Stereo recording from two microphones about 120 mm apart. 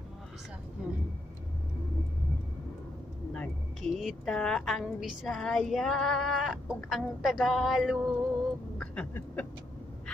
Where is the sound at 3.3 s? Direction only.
10° left (ahead or behind).